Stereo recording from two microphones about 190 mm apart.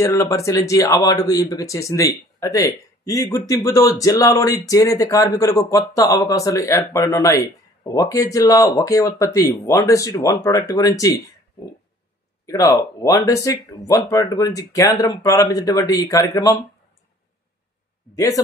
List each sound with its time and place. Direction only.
0.0 s speech: 15° left (ahead or behind)
12.4 s speech: 15° left (ahead or behind)
18.1 s speech: 20° left (ahead or behind)